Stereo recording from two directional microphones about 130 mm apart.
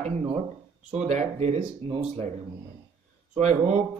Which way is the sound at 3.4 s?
60° right (ahead or behind).